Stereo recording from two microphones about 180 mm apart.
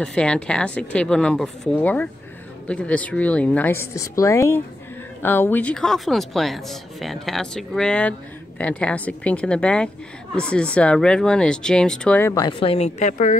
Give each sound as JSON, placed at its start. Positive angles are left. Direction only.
{"t": 0.0, "sound": "a woman's voice", "side_deg": 5}
{"t": 12.4, "sound": "speech", "side_deg": 30}